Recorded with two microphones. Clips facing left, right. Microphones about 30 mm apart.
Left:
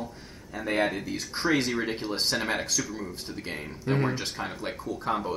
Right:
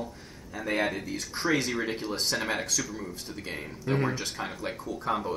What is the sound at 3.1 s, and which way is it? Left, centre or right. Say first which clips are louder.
Speech: left 2 dB; left.